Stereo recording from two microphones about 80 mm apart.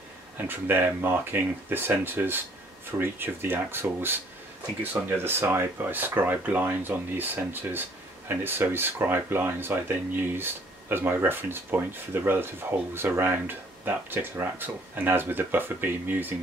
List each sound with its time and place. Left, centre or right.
0.5 s speech: right
8.5 s speech: right